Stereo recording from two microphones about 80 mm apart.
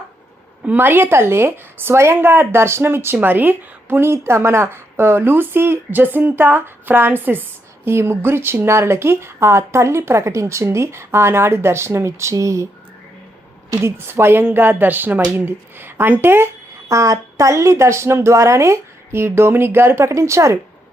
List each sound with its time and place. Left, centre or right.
0.6 s a woman's voice: right
13.7 s a woman's voice: right
16.9 s speech: right